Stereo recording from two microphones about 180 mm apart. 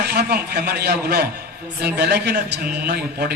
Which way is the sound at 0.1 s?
65° right (ahead or behind).